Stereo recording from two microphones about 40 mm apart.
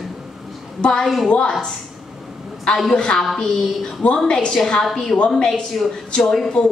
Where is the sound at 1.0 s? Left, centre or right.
Centre.